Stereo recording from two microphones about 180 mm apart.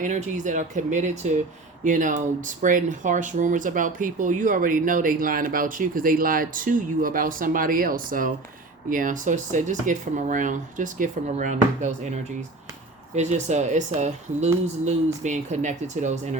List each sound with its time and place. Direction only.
0.0 s speech: 45° right (ahead or behind)
13.1 s speech: 40° right (ahead or behind)